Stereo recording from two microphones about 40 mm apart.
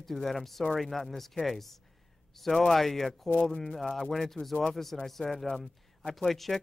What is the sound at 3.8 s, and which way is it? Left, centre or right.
Speech, centre.